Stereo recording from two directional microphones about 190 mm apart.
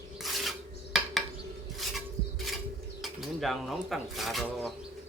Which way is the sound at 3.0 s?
Centre (ahead or behind).